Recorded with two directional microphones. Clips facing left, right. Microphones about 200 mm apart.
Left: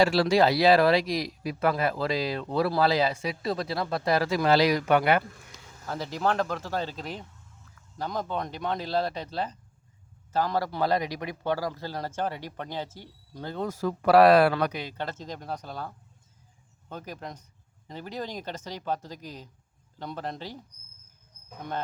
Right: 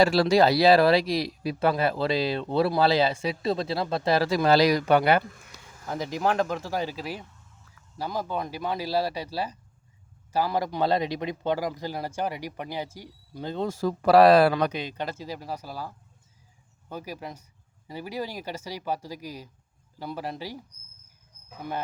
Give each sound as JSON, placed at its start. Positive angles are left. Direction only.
{"t": 0.0, "sound": "speech", "side_deg": -40}
{"t": 5.9, "sound": "speech", "side_deg": -15}
{"t": 14.6, "sound": "speech", "side_deg": -20}